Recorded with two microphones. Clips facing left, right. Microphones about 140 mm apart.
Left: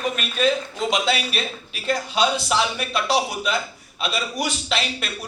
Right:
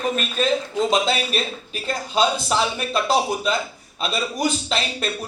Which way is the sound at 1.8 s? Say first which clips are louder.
Even; 30° right (ahead or behind).